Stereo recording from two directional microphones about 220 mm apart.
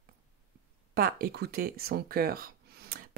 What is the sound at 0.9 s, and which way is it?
Speech, 45° right (ahead or behind).